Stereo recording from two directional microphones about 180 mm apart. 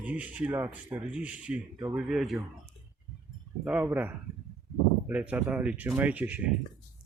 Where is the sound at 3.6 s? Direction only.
10° right (ahead or behind).